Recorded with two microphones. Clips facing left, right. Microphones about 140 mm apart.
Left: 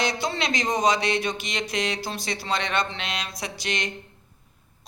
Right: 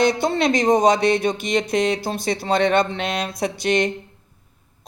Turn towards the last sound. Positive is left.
turn(degrees=-55)  # may be behind; listen again after turning